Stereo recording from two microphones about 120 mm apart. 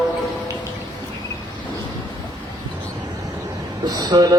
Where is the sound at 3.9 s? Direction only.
35° right (ahead or behind).